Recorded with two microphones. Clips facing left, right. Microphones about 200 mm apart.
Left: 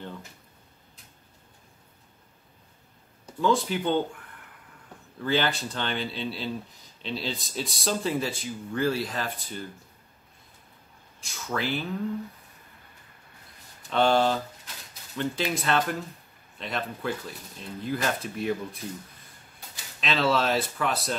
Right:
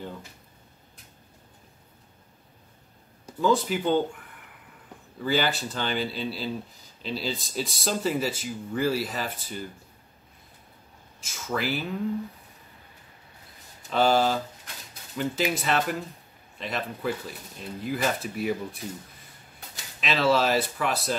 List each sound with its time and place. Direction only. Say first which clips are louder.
3.3 s speech: right 1 dB; 5° right (ahead or behind)
5.2 s speech: even; 5° right (ahead or behind)
11.2 s speech: right 1 dB; centre (ahead or behind)
13.8 s speech: even; 5° right (ahead or behind)
20.0 s speech: right 2 dB; centre (ahead or behind)